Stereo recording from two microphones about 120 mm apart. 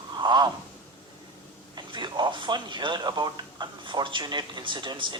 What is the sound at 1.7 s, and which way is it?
Speech, 40° right (ahead or behind).